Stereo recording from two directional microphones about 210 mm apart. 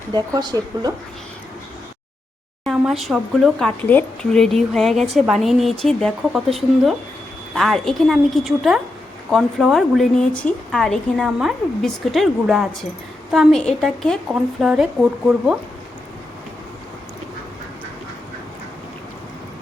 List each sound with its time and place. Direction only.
0.1 s a woman's voice: 20° right (ahead or behind)
2.6 s a woman's voice: centre (ahead or behind)